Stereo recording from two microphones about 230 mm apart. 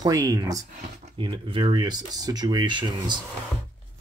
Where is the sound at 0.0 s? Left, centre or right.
Centre.